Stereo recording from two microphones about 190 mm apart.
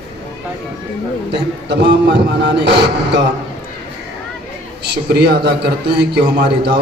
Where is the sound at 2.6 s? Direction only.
65° right (ahead or behind).